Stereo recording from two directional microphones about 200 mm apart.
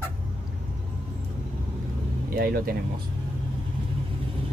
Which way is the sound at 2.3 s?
45° right (ahead or behind).